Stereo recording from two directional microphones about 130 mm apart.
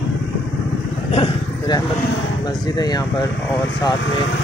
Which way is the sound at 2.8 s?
30° left (ahead or behind).